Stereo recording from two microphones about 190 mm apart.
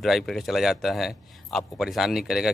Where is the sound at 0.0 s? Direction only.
Centre (ahead or behind).